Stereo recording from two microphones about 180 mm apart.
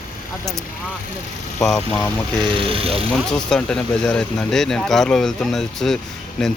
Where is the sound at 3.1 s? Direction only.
5° left (ahead or behind).